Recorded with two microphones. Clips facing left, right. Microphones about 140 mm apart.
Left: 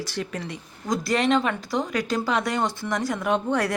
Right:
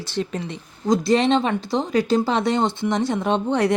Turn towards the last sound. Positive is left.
turn(degrees=-20)  # may be behind; listen again after turning